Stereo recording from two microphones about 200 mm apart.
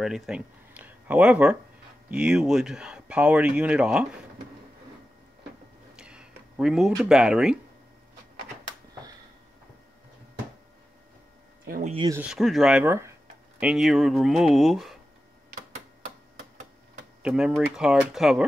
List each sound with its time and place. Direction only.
0.0 s speech: centre (ahead or behind)
5.9 s a sound: 5° right (ahead or behind)
11.6 s speech: 45° right (ahead or behind)
12.1 s speech: 5° right (ahead or behind)
17.2 s speech: 5° right (ahead or behind)